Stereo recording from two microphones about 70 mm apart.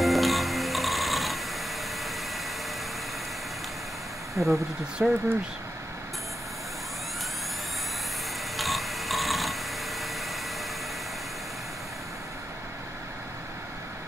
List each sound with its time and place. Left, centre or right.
0.0 s music: centre
4.4 s speech: right
5.0 s speech: centre
8.5 s a sound: centre